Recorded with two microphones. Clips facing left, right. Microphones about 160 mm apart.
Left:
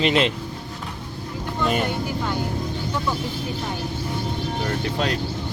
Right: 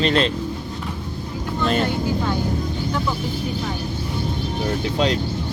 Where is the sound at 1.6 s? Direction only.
10° left (ahead or behind).